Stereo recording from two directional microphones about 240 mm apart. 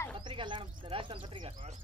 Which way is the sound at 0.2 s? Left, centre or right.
Centre.